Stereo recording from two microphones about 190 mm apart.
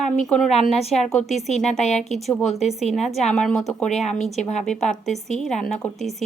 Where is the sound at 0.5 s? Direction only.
35° left (ahead or behind).